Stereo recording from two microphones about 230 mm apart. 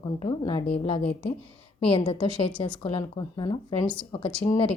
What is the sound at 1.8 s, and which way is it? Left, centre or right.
A woman's voice, left.